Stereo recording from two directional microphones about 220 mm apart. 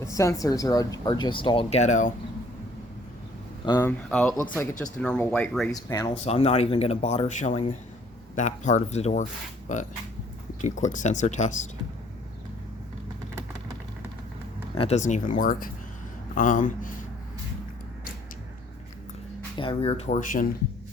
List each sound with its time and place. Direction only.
0.0 s speech: 15° left (ahead or behind); by 2.1 s 35° left (ahead or behind)
3.7 s speech: 10° left (ahead or behind)
6.2 s speech: 30° left (ahead or behind)
14.8 s speech: 30° left (ahead or behind)
19.5 s speech: 25° left (ahead or behind)